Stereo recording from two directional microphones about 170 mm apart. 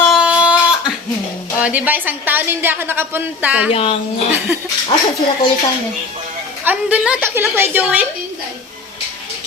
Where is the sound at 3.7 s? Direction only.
35° left (ahead or behind).